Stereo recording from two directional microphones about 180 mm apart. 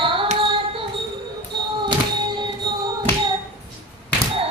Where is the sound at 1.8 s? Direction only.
25° right (ahead or behind).